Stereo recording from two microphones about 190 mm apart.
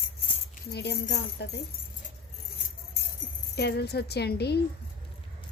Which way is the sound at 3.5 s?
60° left (ahead or behind).